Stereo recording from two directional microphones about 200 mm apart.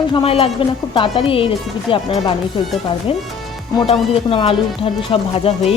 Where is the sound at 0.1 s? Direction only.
25° left (ahead or behind).